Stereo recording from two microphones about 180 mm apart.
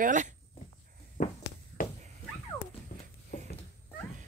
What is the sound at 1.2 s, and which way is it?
Heart sounds, 55° left (ahead or behind).